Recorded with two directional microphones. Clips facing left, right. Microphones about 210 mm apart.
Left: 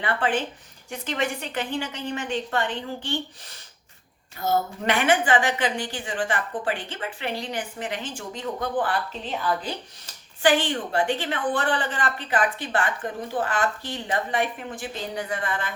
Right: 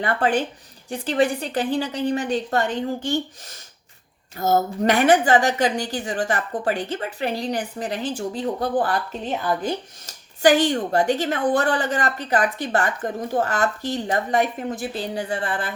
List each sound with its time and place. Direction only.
0.0 s a woman's voice: 40° right (ahead or behind)